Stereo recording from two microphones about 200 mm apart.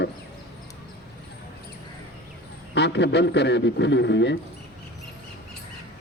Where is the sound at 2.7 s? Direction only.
60° left (ahead or behind).